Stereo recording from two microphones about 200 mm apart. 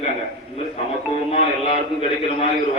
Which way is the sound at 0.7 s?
30° left (ahead or behind).